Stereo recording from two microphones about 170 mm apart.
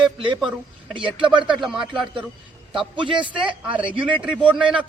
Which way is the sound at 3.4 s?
5° right (ahead or behind).